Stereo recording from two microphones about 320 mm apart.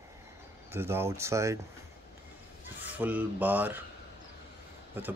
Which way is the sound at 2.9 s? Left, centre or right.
Centre.